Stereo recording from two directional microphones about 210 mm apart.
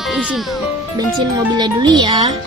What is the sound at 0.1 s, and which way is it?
Speech, 5° right (ahead or behind).